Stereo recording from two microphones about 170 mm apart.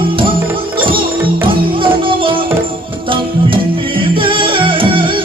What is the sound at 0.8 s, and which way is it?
Music, 30° right (ahead or behind).